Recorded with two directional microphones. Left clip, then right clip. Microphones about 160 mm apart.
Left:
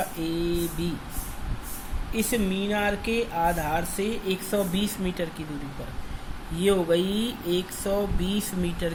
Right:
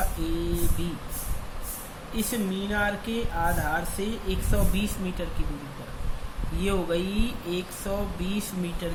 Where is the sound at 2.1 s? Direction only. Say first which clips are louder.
Left 4 dB; 30° left (ahead or behind).